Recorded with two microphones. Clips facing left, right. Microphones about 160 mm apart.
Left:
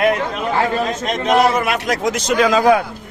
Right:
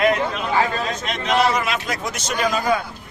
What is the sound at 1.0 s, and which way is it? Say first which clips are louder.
A man's voice: left 4 dB; 45° left (ahead or behind).